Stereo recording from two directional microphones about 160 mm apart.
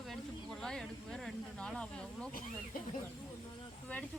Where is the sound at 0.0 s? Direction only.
Centre (ahead or behind).